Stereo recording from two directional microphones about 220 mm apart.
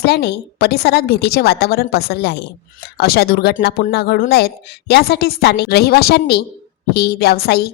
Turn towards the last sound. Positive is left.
turn(degrees=45)  # may be behind; listen again after turning